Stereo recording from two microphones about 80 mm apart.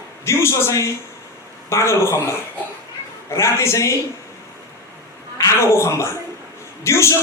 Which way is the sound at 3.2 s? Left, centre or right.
Left.